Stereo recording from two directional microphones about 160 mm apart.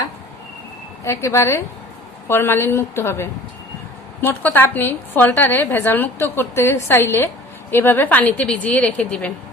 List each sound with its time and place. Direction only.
1.0 s a woman's voice: 20° left (ahead or behind)